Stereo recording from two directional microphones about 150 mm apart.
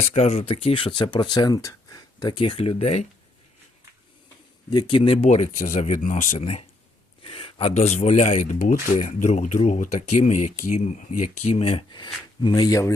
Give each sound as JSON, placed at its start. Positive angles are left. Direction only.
{"t": 0.0, "sound": "speech", "side_deg": 45}
{"t": 4.7, "sound": "speech", "side_deg": 30}
{"t": 8.4, "sound": "speech", "side_deg": 60}